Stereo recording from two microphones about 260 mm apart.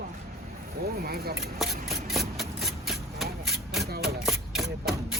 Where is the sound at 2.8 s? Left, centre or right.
Centre.